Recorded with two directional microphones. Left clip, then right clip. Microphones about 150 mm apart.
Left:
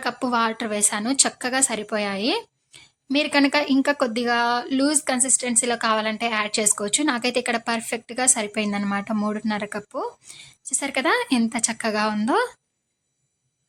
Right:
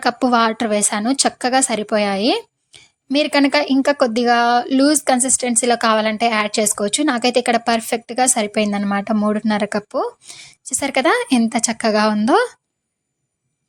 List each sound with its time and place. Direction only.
0.0 s a woman's voice: 35° right (ahead or behind)